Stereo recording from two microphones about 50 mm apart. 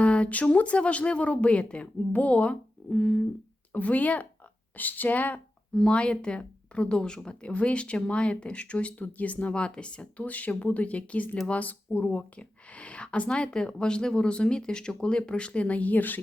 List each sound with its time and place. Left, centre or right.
0.0 s speech: left
5.7 s speech: left